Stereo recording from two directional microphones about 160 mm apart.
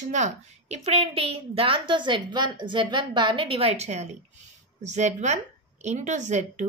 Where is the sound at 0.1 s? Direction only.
45° right (ahead or behind).